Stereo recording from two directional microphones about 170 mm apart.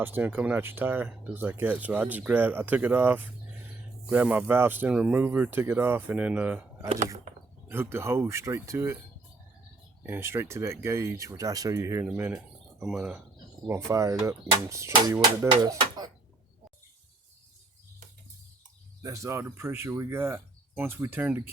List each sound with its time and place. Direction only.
0.0 s speech: 10° right (ahead or behind)
6.8 s speech: 40° right (ahead or behind)
7.7 s speech: 15° right (ahead or behind)
10.0 s speech: 15° right (ahead or behind)
13.7 s speech: 15° right (ahead or behind)
19.0 s speech: 20° right (ahead or behind)